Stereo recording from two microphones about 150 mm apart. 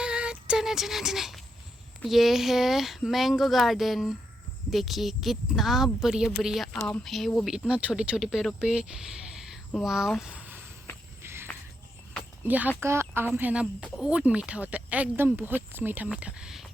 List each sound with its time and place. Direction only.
0.0 s a sound: 5° right (ahead or behind)
2.0 s a woman's voice: centre (ahead or behind)
11.2 s walk: 15° right (ahead or behind)
12.5 s speech: 10° right (ahead or behind)